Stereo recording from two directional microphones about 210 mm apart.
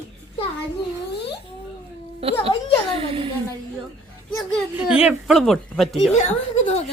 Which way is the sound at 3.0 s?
25° right (ahead or behind).